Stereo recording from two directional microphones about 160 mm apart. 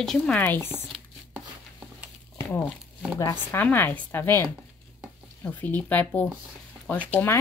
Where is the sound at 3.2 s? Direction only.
20° left (ahead or behind).